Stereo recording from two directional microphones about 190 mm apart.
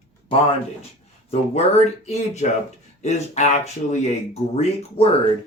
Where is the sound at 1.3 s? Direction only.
35° left (ahead or behind).